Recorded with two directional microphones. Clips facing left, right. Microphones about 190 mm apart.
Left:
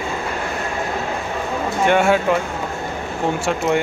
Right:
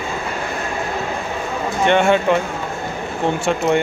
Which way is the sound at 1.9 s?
5° left (ahead or behind).